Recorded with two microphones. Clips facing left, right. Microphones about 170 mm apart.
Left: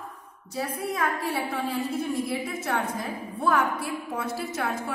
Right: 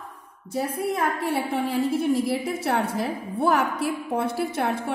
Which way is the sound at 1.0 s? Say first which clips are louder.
Right 3 dB; 30° right (ahead or behind).